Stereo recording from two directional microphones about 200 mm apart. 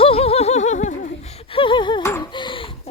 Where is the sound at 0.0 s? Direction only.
30° left (ahead or behind).